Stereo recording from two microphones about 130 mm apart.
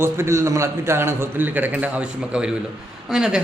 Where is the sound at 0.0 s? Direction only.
20° right (ahead or behind).